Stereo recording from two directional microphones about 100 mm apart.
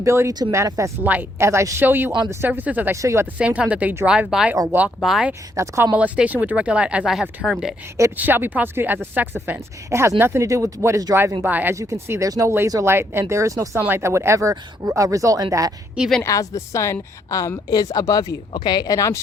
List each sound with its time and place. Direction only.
0.0 s a woman's voice: 30° right (ahead or behind)
2.9 s a woman's voice: 30° right (ahead or behind)
3.3 s speech: 15° right (ahead or behind)
5.5 s a woman's voice: 30° right (ahead or behind)
5.9 s speech: 15° right (ahead or behind)
8.1 s a woman's voice: 20° right (ahead or behind)
11.4 s speech: 15° right (ahead or behind)
11.7 s a woman's voice: 30° right (ahead or behind)
16.2 s a woman's voice: 35° left (ahead or behind)